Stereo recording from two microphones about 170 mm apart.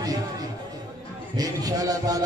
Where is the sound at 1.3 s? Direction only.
20° right (ahead or behind).